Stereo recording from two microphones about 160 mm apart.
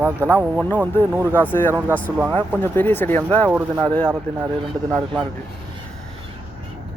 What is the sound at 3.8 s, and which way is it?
Speech, 5° left (ahead or behind).